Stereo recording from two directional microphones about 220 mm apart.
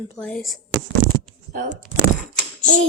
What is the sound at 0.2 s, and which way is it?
Speech, 5° left (ahead or behind).